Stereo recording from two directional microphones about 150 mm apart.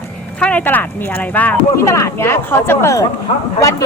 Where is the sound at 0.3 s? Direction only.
10° left (ahead or behind).